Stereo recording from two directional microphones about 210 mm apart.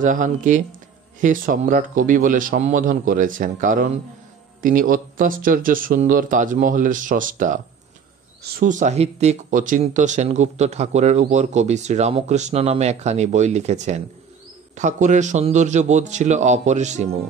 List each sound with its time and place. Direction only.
0.0 s speech: 40° right (ahead or behind)